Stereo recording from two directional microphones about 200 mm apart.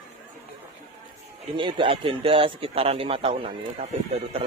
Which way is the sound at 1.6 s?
25° right (ahead or behind).